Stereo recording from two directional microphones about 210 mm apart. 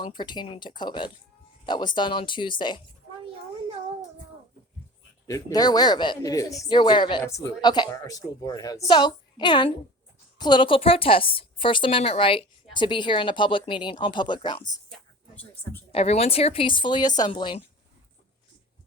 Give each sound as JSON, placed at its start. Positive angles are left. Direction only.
{"t": 0.0, "sound": "a woman's voice", "side_deg": 20}
{"t": 5.2, "sound": "a woman's voice", "side_deg": 15}
{"t": 14.8, "sound": "a sound", "side_deg": 5}
{"t": 15.9, "sound": "a woman's voice", "side_deg": 30}